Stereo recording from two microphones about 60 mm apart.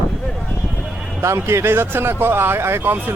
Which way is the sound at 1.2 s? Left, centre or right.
Right.